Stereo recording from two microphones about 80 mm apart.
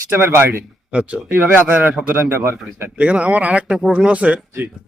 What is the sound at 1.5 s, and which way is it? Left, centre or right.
Mantra, right.